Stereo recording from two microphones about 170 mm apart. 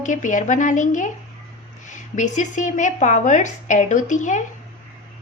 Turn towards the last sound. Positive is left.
turn(degrees=45)  # may be behind; listen again after turning